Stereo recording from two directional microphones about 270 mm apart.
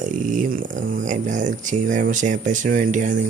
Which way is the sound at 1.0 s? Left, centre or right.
Right.